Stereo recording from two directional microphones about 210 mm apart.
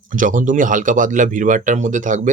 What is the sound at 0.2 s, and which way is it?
Speech, 40° right (ahead or behind).